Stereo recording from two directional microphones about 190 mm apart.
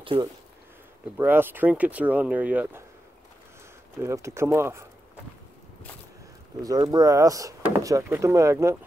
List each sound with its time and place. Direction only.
0.0 s speech: 25° right (ahead or behind)
1.1 s speech: 10° right (ahead or behind)
4.0 s speech: 15° right (ahead or behind)
6.6 s speech: 20° right (ahead or behind)